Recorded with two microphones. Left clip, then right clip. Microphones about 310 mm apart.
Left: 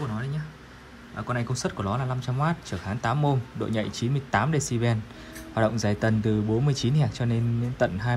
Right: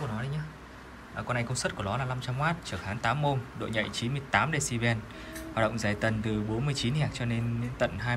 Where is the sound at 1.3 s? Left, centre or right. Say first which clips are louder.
Left 1 dB; centre.